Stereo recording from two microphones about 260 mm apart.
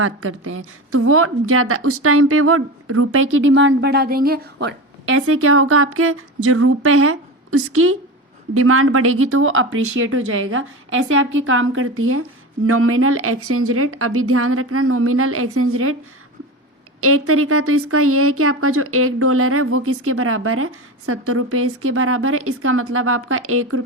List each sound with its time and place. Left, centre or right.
0.0 s a woman's voice: right
17.0 s a woman's voice: right